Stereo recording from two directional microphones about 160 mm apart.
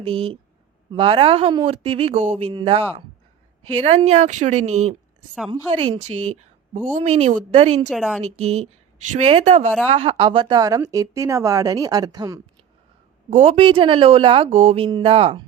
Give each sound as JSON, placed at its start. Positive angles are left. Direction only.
{"t": 0.0, "sound": "speech", "side_deg": -35}
{"t": 5.5, "sound": "speech", "side_deg": -30}
{"t": 6.0, "sound": "speech", "side_deg": -45}
{"t": 7.9, "sound": "speech", "side_deg": 0}
{"t": 8.2, "sound": "a woman's voice", "side_deg": -40}
{"t": 13.3, "sound": "speech", "side_deg": -40}
{"t": 14.8, "sound": "speech", "side_deg": -30}